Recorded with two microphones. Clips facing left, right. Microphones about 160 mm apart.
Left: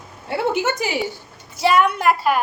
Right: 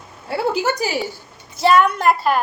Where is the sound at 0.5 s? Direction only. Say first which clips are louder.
Right 1 dB; 20° left (ahead or behind).